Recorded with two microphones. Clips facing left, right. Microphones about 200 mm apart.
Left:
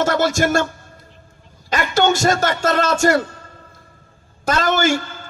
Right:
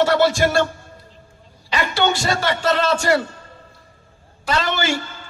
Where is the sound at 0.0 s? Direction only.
45° left (ahead or behind).